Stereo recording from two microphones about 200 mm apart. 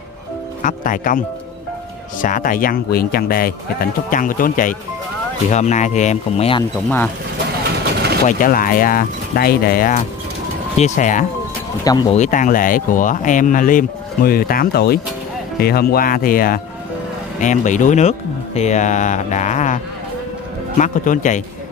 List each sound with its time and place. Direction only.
0.6 s speech: 40° left (ahead or behind)
2.2 s speech: 40° left (ahead or behind)
8.3 s speech: 45° left (ahead or behind)
11.8 s speech: 20° left (ahead or behind)
12.1 s speech: 40° left (ahead or behind)